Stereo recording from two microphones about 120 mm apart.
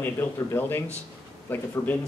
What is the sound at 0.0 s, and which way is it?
Speech, 15° left (ahead or behind).